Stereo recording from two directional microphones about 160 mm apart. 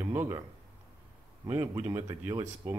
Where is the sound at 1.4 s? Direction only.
15° right (ahead or behind).